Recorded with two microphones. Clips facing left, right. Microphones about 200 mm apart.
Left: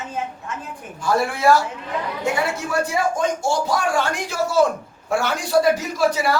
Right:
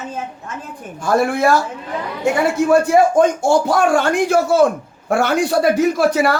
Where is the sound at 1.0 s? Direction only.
50° right (ahead or behind).